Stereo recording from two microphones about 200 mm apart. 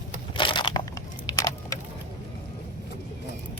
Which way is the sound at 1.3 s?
15° left (ahead or behind).